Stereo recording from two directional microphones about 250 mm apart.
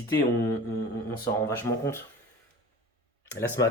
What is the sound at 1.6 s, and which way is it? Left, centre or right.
Speech, centre.